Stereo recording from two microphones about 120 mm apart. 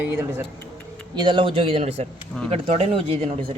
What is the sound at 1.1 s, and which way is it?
A man's voice, 40° right (ahead or behind).